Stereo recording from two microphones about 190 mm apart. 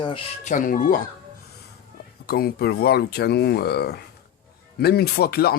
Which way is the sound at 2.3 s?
55° left (ahead or behind).